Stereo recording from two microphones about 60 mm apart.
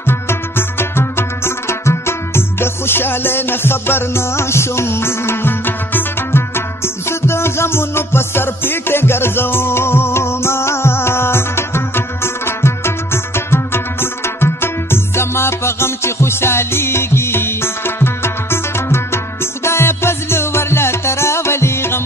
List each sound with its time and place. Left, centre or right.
0.0 s music: left